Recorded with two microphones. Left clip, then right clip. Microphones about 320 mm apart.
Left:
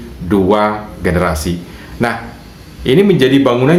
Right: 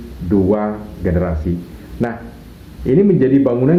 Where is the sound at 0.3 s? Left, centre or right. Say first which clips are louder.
Left 5 dB; left.